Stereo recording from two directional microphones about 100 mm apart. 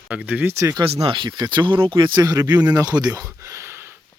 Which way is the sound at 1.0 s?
50° right (ahead or behind).